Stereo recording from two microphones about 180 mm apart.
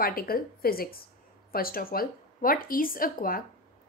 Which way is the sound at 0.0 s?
55° left (ahead or behind).